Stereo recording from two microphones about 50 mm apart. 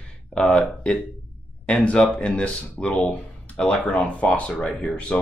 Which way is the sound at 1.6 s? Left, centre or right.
Left.